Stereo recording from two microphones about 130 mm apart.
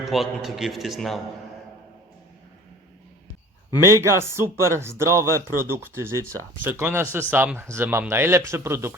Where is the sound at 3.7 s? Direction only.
20° right (ahead or behind).